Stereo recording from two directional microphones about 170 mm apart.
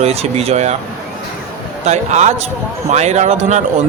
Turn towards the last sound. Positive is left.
turn(degrees=-45)  # may be behind; listen again after turning